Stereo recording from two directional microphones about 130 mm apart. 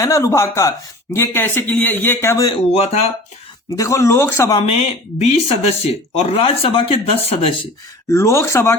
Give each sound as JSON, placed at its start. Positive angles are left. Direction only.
{"t": 0.0, "sound": "a man's voice", "side_deg": 25}
{"t": 2.7, "sound": "speech", "side_deg": 50}
{"t": 3.8, "sound": "speech", "side_deg": 25}
{"t": 4.6, "sound": "speech", "side_deg": 50}
{"t": 8.1, "sound": "speech", "side_deg": 20}